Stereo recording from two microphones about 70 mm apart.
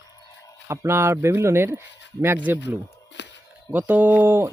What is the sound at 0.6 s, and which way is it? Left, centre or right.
Speech, right.